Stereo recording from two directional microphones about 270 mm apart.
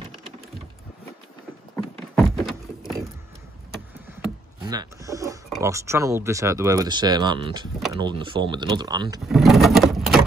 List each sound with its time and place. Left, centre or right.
2.1 s a sound: centre
4.6 s speech: centre
9.3 s vehicle: centre